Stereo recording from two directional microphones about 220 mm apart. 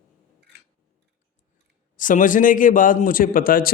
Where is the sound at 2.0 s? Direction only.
35° left (ahead or behind).